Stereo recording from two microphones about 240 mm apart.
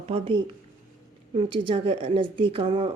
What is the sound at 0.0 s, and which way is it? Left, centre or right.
Speech, right.